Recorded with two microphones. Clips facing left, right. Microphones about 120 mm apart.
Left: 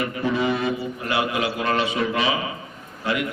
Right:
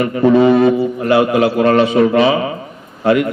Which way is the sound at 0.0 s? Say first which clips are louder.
Right 12 dB; 50° right (ahead or behind).